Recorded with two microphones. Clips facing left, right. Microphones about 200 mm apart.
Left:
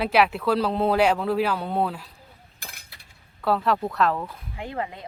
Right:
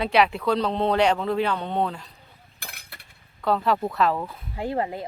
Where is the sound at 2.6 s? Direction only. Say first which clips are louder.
Right 3 dB; 55° right (ahead or behind).